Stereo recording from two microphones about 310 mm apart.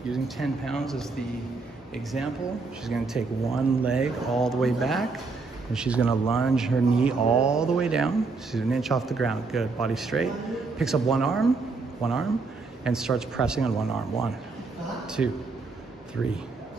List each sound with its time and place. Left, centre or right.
0.1 s speech: centre
2.1 s speech: centre
15.2 s speech: centre